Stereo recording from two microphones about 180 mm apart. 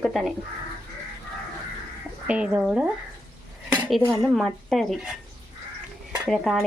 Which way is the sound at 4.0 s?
15° right (ahead or behind).